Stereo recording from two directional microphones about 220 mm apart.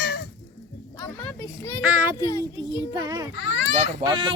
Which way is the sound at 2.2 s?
15° left (ahead or behind).